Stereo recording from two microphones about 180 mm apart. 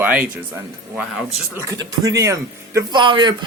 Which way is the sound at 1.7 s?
20° right (ahead or behind).